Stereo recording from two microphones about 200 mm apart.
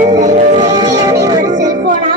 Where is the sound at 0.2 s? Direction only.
35° right (ahead or behind).